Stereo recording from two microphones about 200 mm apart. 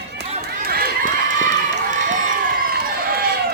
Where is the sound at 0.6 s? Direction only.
50° right (ahead or behind).